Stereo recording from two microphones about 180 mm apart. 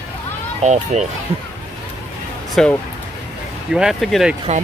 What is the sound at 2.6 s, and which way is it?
Speech, 5° left (ahead or behind).